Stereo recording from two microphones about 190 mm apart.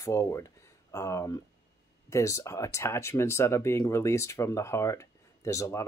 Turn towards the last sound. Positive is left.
turn(degrees=15)  # may be behind; listen again after turning